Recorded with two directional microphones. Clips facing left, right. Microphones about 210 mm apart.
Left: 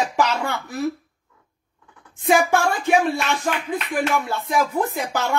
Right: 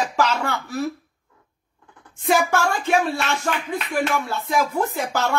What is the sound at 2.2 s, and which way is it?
Speech, 15° left (ahead or behind).